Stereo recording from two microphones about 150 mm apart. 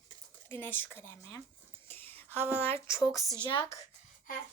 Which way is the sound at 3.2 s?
20° right (ahead or behind).